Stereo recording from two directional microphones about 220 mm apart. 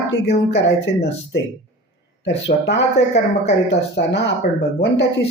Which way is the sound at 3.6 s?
50° left (ahead or behind).